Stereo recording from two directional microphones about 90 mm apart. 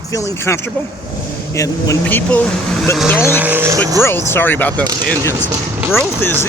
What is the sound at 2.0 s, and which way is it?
Speech, 15° left (ahead or behind).